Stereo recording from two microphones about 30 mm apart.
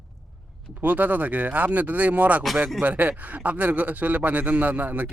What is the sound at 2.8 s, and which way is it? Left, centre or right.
A man's voice, right.